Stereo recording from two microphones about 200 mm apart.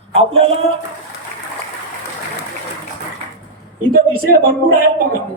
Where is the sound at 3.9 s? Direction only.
45° right (ahead or behind).